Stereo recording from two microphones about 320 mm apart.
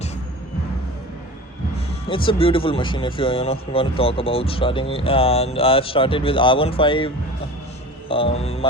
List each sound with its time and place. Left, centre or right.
1.7 s speech: centre
8.0 s music: centre